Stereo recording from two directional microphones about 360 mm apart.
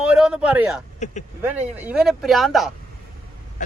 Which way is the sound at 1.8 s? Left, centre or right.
Centre.